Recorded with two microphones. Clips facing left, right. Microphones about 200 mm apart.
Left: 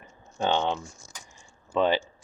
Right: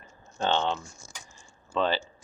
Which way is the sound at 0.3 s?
15° left (ahead or behind).